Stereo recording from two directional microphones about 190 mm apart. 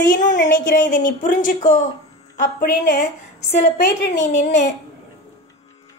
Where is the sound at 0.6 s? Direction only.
45° left (ahead or behind).